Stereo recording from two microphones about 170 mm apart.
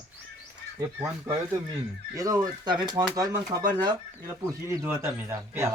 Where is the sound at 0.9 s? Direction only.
10° right (ahead or behind).